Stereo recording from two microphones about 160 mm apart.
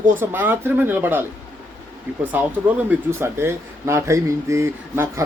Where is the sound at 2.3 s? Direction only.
10° right (ahead or behind).